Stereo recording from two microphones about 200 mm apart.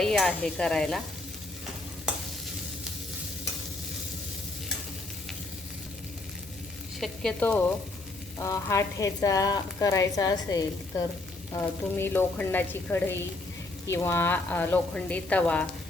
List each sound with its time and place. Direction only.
0.0 s speech: centre (ahead or behind)
7.0 s speech: 5° left (ahead or behind)